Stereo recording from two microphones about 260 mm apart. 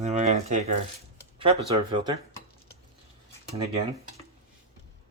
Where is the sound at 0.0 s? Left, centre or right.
Right.